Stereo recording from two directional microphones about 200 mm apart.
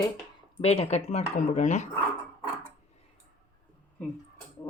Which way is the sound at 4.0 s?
5° left (ahead or behind).